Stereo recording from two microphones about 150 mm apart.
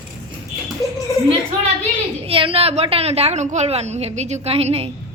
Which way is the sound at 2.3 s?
35° right (ahead or behind).